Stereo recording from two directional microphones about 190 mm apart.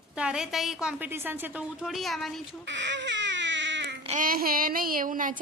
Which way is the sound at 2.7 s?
70° right (ahead or behind).